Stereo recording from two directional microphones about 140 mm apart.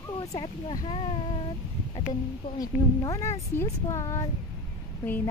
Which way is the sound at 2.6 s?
25° left (ahead or behind).